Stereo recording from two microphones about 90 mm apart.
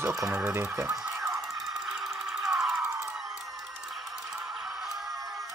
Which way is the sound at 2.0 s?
5° right (ahead or behind).